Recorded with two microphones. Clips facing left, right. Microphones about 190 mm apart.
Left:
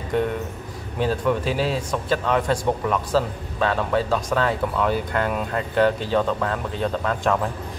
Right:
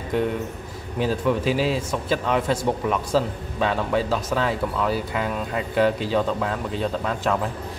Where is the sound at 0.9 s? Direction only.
10° right (ahead or behind).